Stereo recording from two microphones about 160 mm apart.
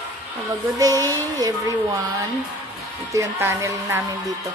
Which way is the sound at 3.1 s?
15° right (ahead or behind).